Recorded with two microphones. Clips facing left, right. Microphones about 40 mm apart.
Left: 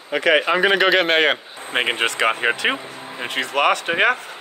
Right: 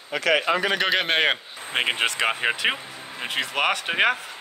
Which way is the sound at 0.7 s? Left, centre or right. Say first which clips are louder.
Left 6 dB; centre.